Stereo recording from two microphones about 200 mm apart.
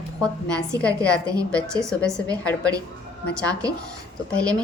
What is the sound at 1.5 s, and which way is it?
Speech, 5° left (ahead or behind).